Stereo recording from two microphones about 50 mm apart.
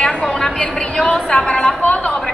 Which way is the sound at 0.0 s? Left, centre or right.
Centre.